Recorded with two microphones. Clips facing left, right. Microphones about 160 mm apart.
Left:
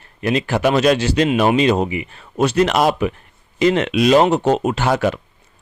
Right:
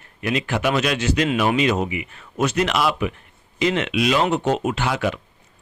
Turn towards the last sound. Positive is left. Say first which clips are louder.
# left 5 dB
turn(degrees=40)  # may be behind; listen again after turning